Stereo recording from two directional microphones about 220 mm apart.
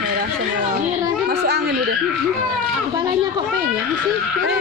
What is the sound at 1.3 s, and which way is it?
Children playing, 50° right (ahead or behind).